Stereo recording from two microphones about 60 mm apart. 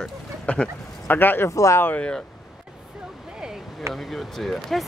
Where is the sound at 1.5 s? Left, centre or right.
Left.